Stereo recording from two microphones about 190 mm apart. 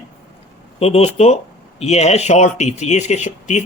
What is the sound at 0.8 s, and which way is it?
Speech, 35° left (ahead or behind).